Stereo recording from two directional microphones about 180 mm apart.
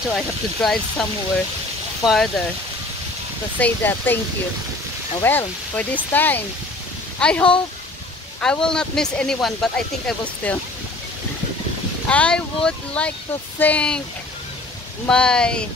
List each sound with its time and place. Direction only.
0.1 s speech: 5° left (ahead or behind)
2.0 s speech: 5° left (ahead or behind)
3.5 s speech: 10° left (ahead or behind)
5.2 s speech: 10° left (ahead or behind)
12.1 s speech: 5° left (ahead or behind)
15.0 s speech: 5° left (ahead or behind)